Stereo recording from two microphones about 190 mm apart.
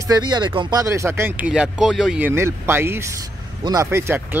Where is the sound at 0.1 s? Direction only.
25° right (ahead or behind).